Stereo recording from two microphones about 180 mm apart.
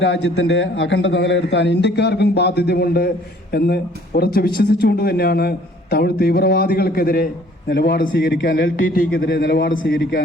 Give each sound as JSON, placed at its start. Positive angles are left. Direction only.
{"t": 0.0, "sound": "a man's voice", "side_deg": 75}